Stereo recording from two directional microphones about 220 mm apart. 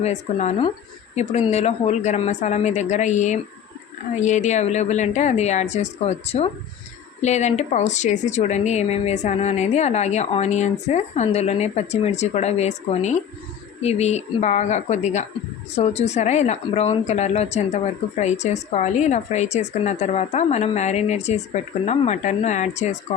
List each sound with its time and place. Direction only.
0.0 s a woman's voice: 30° left (ahead or behind)